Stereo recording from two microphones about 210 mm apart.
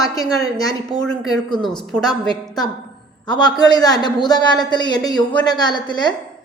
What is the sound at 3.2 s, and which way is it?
A man's voice, 20° left (ahead or behind).